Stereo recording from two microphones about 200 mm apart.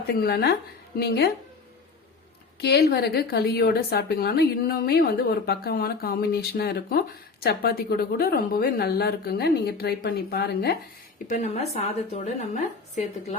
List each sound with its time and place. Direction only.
0.1 s a woman's voice: 50° left (ahead or behind)
2.6 s a woman's voice: 55° left (ahead or behind)
11.3 s a woman's voice: 35° left (ahead or behind)